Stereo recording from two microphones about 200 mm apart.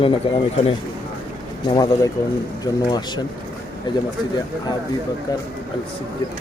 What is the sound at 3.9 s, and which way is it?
Speech, 25° left (ahead or behind).